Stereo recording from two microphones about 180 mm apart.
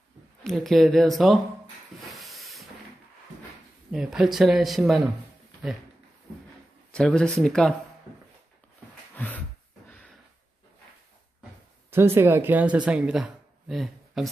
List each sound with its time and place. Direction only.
0.4 s speech: centre (ahead or behind)
2.0 s hiss: centre (ahead or behind)
3.9 s speech: 5° right (ahead or behind)
6.9 s speech: 5° left (ahead or behind)
9.1 s a sound: 10° left (ahead or behind)
11.9 s speech: 15° right (ahead or behind)